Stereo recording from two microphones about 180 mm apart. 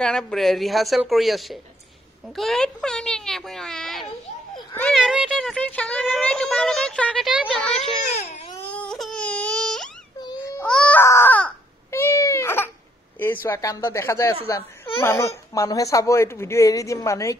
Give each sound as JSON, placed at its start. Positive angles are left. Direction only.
{"t": 0.0, "sound": "speech", "side_deg": 5}
{"t": 8.1, "sound": "baby cry", "side_deg": 35}
{"t": 8.6, "sound": "baby cry", "side_deg": 5}
{"t": 13.2, "sound": "speech", "side_deg": 10}